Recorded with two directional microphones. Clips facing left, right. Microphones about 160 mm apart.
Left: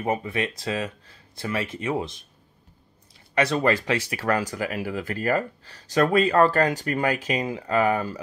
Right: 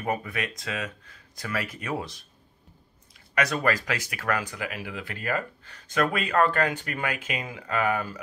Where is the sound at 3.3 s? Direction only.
30° left (ahead or behind).